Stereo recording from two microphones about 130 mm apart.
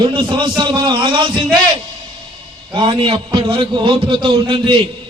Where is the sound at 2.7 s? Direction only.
40° right (ahead or behind).